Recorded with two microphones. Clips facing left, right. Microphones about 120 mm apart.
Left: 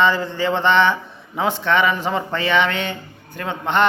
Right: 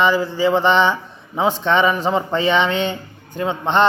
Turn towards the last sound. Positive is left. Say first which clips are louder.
# right 3 dB
turn(degrees=-20)  # may be behind; listen again after turning